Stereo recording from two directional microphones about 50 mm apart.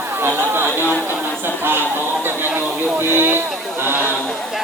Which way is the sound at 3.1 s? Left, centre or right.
Right.